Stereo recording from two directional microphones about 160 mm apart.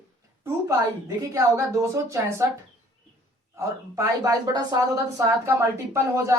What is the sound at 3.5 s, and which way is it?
A woman's voice, 20° right (ahead or behind).